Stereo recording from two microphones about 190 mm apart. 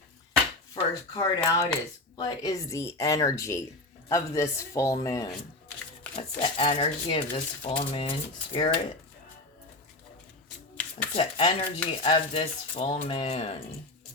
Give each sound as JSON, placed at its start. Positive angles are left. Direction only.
{"t": 1.1, "sound": "a woman's voice", "side_deg": 20}
{"t": 6.1, "sound": "speech", "side_deg": 30}
{"t": 11.1, "sound": "speech", "side_deg": 30}